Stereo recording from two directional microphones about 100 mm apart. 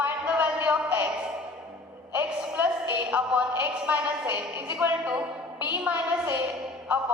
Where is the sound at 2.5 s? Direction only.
15° right (ahead or behind).